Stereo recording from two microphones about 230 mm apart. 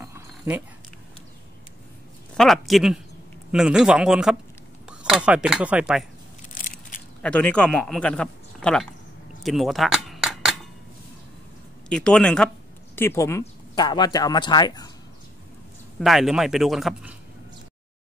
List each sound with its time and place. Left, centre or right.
0.0 s dog: centre
2.3 s a man's voice: centre
6.5 s a sound: left
7.2 s a man's voice: centre
9.4 s a sound: centre
11.9 s a man's voice: centre
16.0 s a man's voice: centre